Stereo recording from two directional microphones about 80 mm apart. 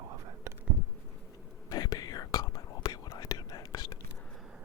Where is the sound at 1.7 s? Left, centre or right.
Left.